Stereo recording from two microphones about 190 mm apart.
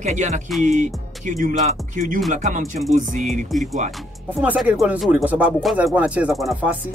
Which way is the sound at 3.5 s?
Centre (ahead or behind).